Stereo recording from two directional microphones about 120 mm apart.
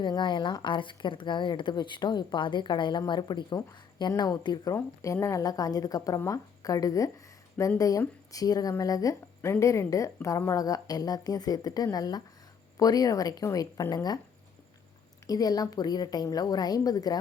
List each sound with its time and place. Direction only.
0.0 s a woman's voice: 40° left (ahead or behind)
15.3 s speech: 30° left (ahead or behind)